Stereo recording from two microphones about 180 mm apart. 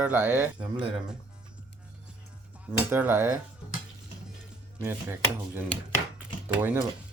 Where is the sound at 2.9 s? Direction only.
10° right (ahead or behind).